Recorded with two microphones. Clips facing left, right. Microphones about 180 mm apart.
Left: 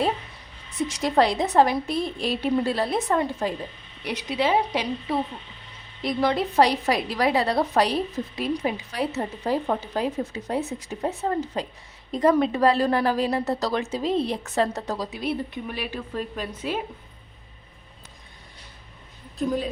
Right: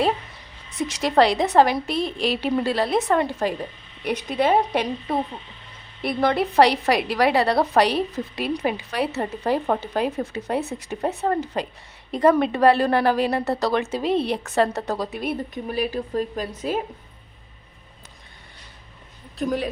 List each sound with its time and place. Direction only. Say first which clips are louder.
0.9 s a woman's voice: right 3 dB; 75° right (ahead or behind)
4.0 s a woman's voice: right 3 dB; 50° right (ahead or behind)
19.4 s a woman's voice: right 1 dB; 70° right (ahead or behind)